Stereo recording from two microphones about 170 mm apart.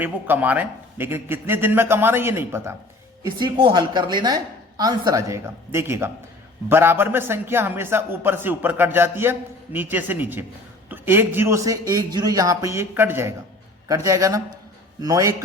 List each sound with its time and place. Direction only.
0.0 s a man's voice: 10° right (ahead or behind)
3.4 s a man's voice: 25° right (ahead or behind)